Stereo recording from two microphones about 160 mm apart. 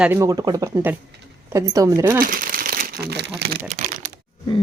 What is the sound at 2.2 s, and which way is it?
Crumpling, 60° right (ahead or behind).